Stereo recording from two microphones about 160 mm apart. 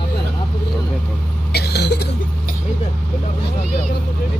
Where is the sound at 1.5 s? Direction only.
90° left.